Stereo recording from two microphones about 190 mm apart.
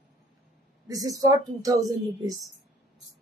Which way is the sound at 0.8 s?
20° right (ahead or behind).